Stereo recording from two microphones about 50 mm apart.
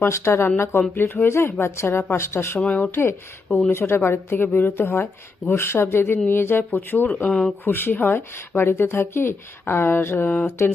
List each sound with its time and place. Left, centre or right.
0.1 s speech: left
0.9 s speech: left
2.6 s speech: left
2.9 s speech: left
6.7 s speech: left
7.3 s speech: centre
7.6 s speech: left